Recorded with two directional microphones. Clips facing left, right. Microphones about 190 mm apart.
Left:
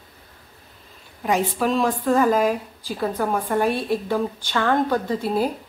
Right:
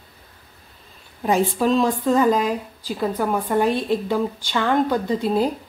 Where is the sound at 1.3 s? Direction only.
25° right (ahead or behind).